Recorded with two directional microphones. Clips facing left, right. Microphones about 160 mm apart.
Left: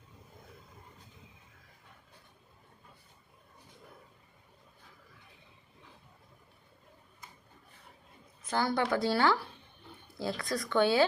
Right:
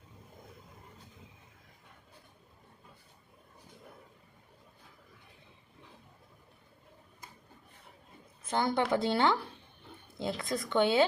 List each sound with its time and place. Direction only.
8.4 s speech: 25° right (ahead or behind)